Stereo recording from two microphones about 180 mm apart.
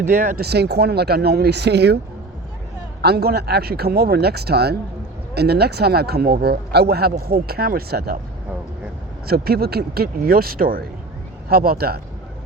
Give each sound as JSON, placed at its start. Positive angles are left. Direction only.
{"t": 0.0, "sound": "speech", "side_deg": -45}
{"t": 3.0, "sound": "speech", "side_deg": -60}
{"t": 9.2, "sound": "speech", "side_deg": -60}